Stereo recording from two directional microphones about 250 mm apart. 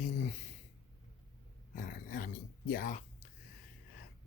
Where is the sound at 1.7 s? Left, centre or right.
Left.